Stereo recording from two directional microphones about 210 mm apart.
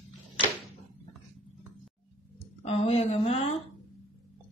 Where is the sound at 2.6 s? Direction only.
30° left (ahead or behind).